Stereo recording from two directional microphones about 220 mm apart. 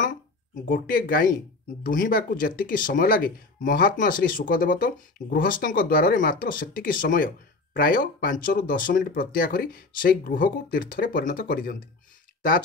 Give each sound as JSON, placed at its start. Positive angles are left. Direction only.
{"t": 0.7, "sound": "speech", "side_deg": 40}